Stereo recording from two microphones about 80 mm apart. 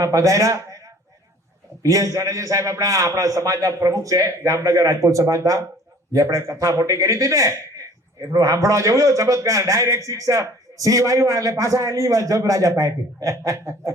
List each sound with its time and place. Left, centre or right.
0.0 s a man's voice: right
1.8 s a man's voice: right